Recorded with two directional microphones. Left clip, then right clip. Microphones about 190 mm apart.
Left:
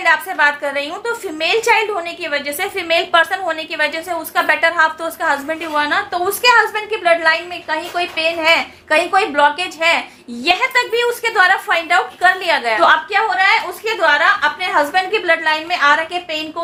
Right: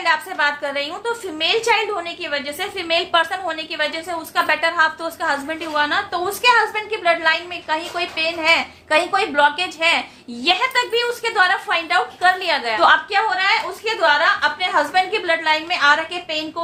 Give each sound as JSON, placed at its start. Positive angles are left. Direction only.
{"t": 0.0, "sound": "a woman's voice", "side_deg": 25}